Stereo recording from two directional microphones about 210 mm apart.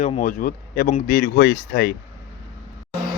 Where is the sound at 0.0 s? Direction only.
35° left (ahead or behind).